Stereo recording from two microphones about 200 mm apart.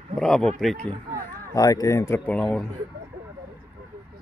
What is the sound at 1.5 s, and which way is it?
Speech, 20° left (ahead or behind).